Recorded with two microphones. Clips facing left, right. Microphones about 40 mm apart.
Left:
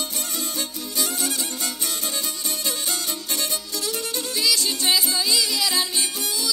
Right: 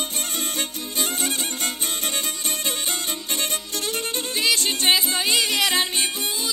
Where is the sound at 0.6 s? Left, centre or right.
Right.